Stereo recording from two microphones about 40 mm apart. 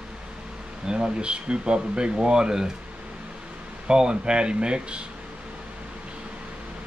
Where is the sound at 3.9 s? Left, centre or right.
Right.